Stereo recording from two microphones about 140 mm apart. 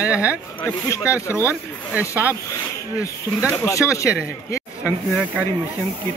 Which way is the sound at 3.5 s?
20° left (ahead or behind).